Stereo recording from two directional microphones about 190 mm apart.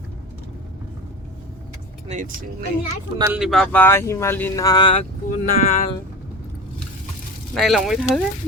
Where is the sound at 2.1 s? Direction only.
40° right (ahead or behind).